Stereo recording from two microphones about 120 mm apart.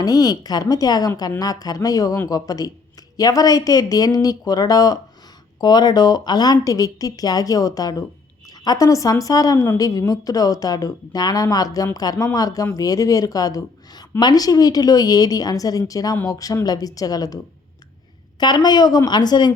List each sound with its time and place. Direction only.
0.0 s a woman's voice: 30° left (ahead or behind)